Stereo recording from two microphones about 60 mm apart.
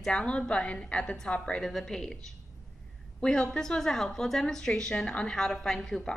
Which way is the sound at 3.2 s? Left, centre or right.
Centre.